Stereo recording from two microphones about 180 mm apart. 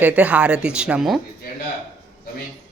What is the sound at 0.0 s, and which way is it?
Speech, 10° right (ahead or behind).